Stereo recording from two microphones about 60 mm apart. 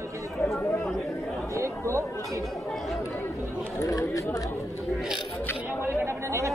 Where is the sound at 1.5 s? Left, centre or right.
Right.